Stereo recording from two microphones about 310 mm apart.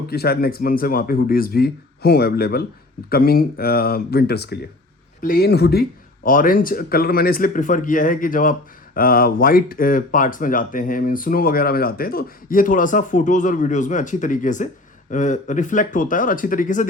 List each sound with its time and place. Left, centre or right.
0.1 s speech: left